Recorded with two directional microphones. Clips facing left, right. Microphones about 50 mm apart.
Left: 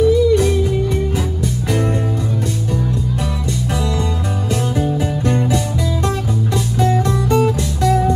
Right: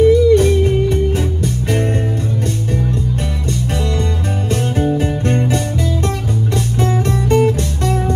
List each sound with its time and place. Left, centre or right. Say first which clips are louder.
0.0 s music: right 3 dB; right
4.9 s music: right 1 dB; right